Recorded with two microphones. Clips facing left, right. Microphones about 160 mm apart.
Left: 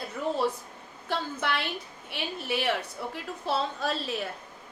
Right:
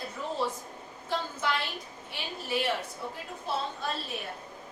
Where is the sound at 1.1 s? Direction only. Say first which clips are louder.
Left 1 dB; 65° left (ahead or behind).